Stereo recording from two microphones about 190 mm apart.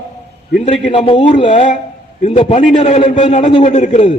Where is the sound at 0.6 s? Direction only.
35° left (ahead or behind).